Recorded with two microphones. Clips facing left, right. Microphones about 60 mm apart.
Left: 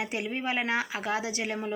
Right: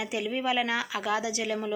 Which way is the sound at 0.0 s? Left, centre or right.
Left.